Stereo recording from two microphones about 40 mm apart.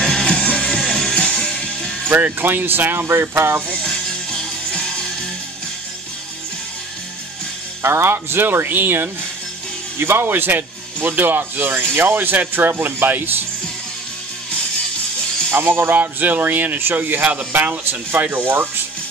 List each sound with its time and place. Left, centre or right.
0.0 s music: centre
2.2 s speech: right
3.8 s music: centre
7.8 s speech: right
9.9 s speech: right
15.5 s speech: right
16.0 s speech: right
17.2 s speech: right
18.2 s speech: right